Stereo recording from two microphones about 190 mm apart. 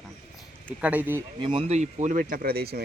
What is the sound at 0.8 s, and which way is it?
Speech, 10° right (ahead or behind).